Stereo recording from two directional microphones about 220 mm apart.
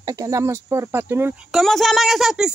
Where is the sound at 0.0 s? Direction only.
15° right (ahead or behind).